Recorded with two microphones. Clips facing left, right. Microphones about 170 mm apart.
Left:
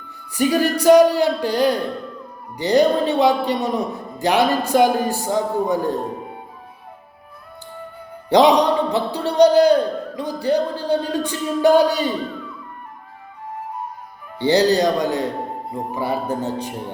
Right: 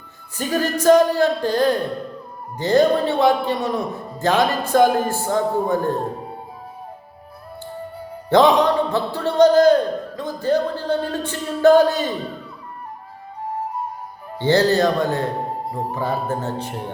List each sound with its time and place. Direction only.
0.3 s music: 15° left (ahead or behind)
8.3 s music: 15° left (ahead or behind)
14.3 s music: 15° left (ahead or behind)